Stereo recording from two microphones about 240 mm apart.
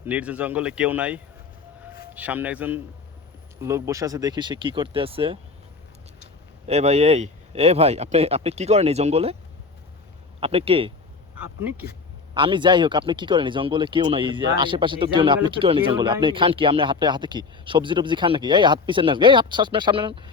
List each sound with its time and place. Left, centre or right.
0.0 s speech: centre; by 5.4 s right
6.7 s speech: right
10.4 s speech: right
12.3 s speech: centre